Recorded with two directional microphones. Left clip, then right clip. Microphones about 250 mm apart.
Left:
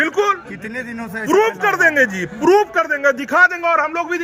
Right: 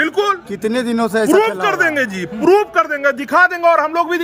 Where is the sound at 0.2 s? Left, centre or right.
Right.